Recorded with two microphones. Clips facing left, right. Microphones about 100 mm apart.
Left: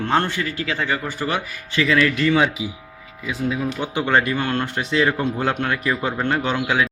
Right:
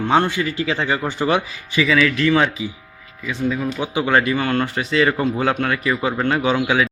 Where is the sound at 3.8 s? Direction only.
5° right (ahead or behind).